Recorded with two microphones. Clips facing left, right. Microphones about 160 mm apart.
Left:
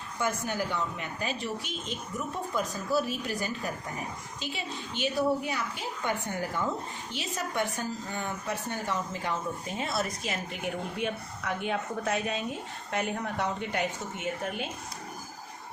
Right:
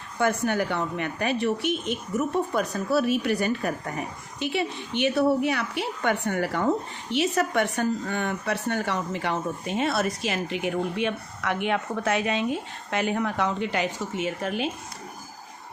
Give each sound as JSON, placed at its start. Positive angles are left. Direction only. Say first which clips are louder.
{"t": 0.2, "sound": "a woman's voice", "louder": "right 7 dB", "side_deg": -65}